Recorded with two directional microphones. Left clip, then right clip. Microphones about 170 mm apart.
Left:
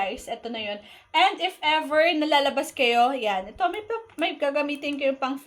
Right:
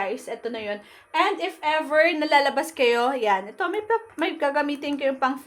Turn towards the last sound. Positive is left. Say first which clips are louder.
# right 2 dB
turn(degrees=-25)  # may be behind; listen again after turning